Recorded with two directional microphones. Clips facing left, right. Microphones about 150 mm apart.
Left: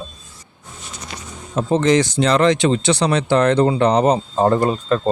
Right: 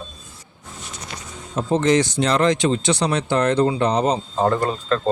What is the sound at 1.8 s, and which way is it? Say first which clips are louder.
Speech: left 2 dB; 90° left.